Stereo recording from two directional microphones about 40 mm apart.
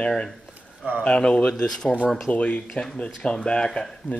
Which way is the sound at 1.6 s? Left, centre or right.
Centre.